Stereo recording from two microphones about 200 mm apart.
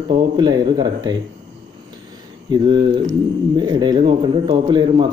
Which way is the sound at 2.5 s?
25° right (ahead or behind).